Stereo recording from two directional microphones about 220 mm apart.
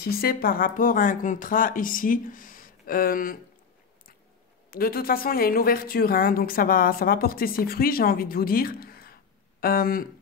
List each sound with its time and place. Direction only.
0.0 s a woman's voice: 45° left (ahead or behind)
4.6 s a woman's voice: 45° left (ahead or behind)